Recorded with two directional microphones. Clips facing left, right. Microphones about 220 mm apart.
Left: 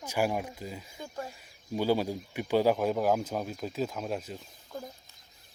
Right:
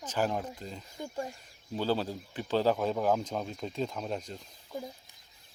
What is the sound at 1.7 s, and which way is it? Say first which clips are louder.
Speech: left 3 dB; 10° left (ahead or behind).